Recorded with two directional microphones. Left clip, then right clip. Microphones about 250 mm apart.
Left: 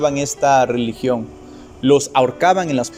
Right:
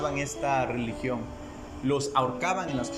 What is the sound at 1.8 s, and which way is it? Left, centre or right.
Speech, left.